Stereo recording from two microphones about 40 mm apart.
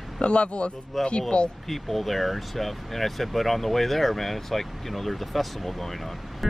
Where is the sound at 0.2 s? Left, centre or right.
Left.